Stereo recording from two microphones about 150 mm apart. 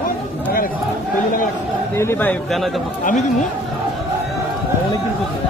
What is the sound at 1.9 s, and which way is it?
Speech, 15° left (ahead or behind).